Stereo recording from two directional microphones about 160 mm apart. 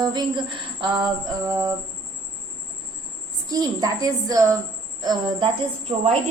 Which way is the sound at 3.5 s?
25° right (ahead or behind).